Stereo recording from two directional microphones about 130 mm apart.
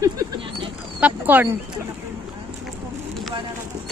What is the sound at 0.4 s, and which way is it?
Dog, 45° right (ahead or behind).